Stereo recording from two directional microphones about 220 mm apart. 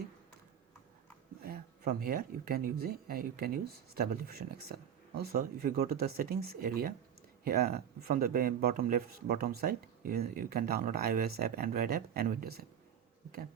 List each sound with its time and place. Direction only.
1.5 s speech: 45° right (ahead or behind)